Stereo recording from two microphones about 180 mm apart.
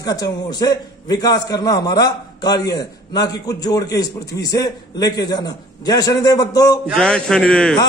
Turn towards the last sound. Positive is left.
turn(degrees=5)  # may be behind; listen again after turning